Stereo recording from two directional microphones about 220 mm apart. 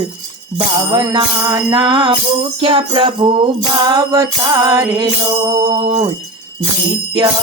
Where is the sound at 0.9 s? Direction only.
15° right (ahead or behind).